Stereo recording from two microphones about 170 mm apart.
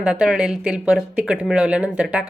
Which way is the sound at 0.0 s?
5° right (ahead or behind).